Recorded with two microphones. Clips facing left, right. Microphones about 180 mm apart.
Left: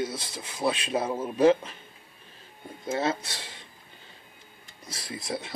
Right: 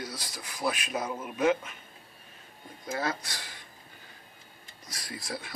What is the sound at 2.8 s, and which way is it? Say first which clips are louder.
Speech: left 5 dB; 25° left (ahead or behind).